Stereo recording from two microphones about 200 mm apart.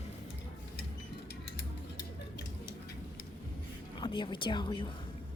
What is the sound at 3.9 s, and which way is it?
Speech, 25° left (ahead or behind).